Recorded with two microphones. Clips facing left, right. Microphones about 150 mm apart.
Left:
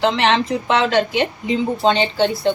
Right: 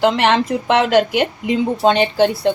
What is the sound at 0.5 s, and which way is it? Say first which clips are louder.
A woman's voice: right 3 dB; 55° right (ahead or behind).